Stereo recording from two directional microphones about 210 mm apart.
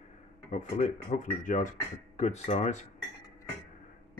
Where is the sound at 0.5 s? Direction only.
35° left (ahead or behind).